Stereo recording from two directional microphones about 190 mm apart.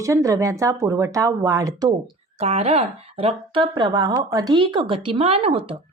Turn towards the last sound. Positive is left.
turn(degrees=-30)  # may be behind; listen again after turning